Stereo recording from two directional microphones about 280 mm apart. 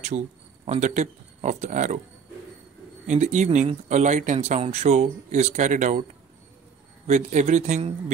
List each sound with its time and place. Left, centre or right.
0.1 s speech: right
3.1 s speech: right
7.1 s speech: right